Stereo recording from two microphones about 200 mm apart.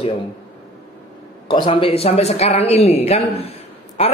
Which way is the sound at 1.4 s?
25° left (ahead or behind).